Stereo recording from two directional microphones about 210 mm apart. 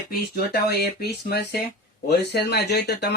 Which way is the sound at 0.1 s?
50° left (ahead or behind).